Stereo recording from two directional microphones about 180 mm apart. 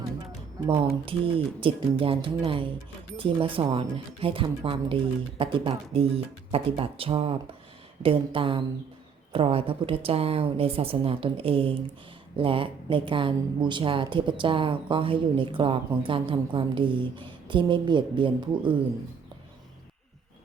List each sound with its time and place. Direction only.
1.0 s a woman's voice: 30° right (ahead or behind)